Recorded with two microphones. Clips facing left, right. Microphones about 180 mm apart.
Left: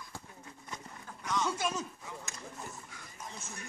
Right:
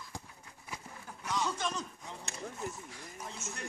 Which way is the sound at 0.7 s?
10° right (ahead or behind).